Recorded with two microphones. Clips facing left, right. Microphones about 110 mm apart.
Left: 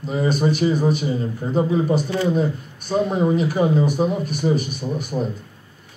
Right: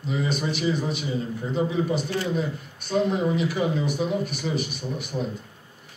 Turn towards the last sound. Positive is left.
turn(degrees=40)  # may be behind; listen again after turning